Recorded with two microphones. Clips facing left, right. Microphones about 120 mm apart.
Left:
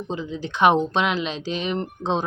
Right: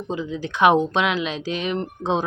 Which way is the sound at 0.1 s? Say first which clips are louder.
Right 3 dB; 10° right (ahead or behind).